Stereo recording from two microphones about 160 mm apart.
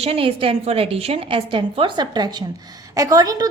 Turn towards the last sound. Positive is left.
turn(degrees=-20)  # may be behind; listen again after turning